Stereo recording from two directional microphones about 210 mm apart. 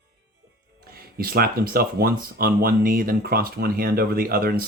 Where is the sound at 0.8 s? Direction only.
45° right (ahead or behind).